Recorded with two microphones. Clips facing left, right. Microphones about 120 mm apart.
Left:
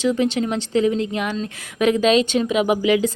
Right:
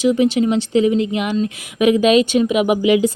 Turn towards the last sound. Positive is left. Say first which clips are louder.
# right 3 dB
turn(degrees=-15)  # may be behind; listen again after turning